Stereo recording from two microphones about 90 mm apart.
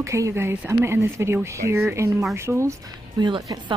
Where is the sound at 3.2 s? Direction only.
55° right (ahead or behind).